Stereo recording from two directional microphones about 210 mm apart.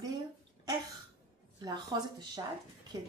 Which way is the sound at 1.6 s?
20° right (ahead or behind).